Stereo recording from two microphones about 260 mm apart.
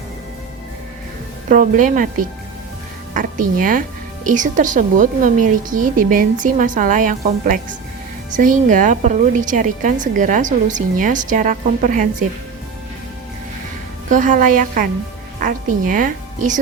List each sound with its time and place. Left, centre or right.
1.5 s a woman's voice: right
14.1 s a woman's voice: right